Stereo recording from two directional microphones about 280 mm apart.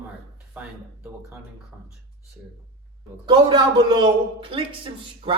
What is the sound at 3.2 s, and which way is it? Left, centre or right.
Speech, centre.